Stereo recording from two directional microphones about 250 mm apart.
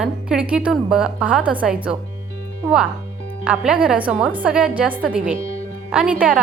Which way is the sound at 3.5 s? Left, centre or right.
Centre.